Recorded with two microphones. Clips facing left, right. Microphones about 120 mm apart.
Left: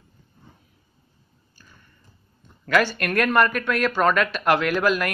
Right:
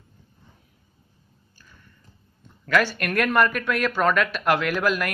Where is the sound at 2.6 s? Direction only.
Centre (ahead or behind).